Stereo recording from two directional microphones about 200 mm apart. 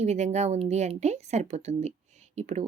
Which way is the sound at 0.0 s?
35° right (ahead or behind).